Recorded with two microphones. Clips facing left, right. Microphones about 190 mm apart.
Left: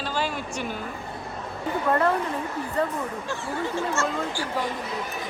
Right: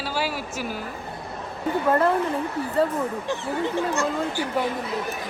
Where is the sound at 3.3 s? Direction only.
20° right (ahead or behind).